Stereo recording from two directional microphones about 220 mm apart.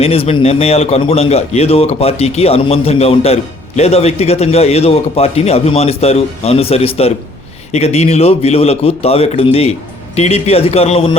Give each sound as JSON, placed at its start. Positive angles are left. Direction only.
{"t": 0.0, "sound": "a man's voice", "side_deg": 25}